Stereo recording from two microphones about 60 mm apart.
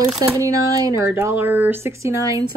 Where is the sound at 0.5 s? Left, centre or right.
Right.